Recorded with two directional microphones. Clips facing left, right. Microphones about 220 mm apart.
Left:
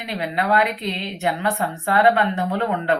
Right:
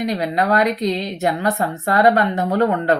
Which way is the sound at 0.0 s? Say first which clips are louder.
Right 5 dB; 40° right (ahead or behind).